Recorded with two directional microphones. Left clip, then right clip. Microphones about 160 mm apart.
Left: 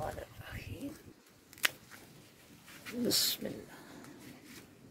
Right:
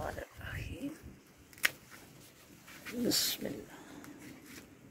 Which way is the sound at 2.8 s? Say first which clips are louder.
Left 1 dB; 5° left (ahead or behind).